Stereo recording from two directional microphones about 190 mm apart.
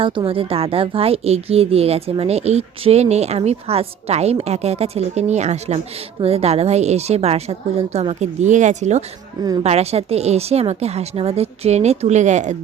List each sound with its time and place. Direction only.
0.0 s a woman's voice: 30° right (ahead or behind)